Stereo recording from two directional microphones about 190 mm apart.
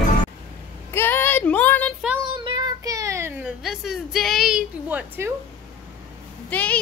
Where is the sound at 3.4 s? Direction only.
Centre (ahead or behind).